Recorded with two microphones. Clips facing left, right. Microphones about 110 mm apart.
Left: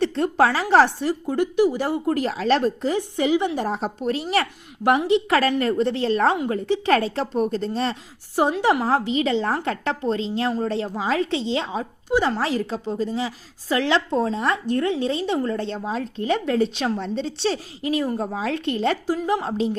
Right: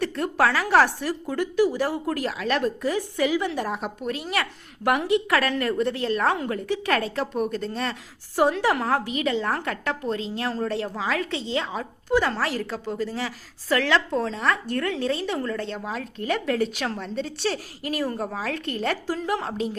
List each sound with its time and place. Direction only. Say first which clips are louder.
0.0 s speech: left 4 dB; 25° left (ahead or behind)